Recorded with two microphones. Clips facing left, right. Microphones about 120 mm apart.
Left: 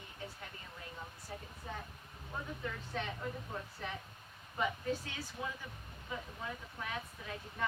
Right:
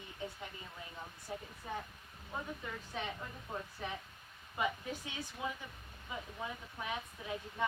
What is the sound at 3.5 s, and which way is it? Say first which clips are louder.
Speech: right 1 dB; 20° right (ahead or behind).